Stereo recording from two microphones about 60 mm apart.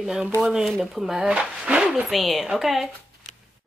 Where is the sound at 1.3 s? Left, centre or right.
Centre.